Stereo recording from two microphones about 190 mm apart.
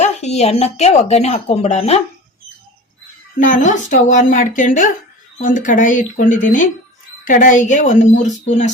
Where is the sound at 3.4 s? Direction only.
40° left (ahead or behind).